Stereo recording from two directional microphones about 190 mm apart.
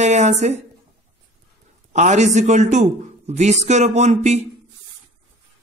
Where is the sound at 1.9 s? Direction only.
40° right (ahead or behind).